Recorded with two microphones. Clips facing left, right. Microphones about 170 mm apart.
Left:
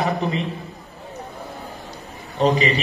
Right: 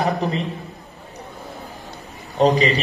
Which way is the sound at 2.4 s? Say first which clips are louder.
Right 2 dB; 35° right (ahead or behind).